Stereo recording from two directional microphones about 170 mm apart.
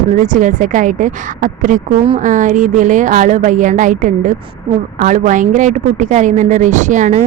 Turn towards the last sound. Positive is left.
turn(degrees=-45)  # may be behind; listen again after turning